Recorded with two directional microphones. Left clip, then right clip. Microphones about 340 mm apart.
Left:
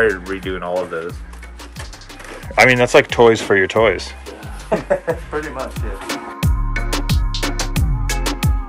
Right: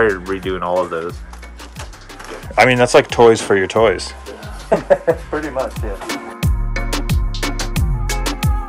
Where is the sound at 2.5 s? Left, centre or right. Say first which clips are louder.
Even; centre.